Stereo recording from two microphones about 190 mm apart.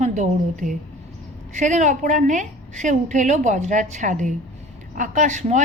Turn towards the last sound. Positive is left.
turn(degrees=-40)  # may be behind; listen again after turning